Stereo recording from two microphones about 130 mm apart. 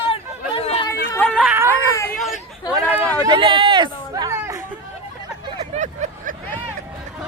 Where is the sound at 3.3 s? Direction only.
40° right (ahead or behind).